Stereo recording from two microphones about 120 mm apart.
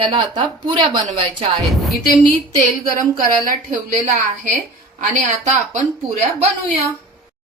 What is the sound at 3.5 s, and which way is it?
A woman's voice, 90° right.